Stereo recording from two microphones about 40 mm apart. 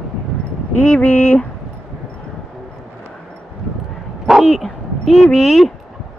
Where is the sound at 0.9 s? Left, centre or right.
Left.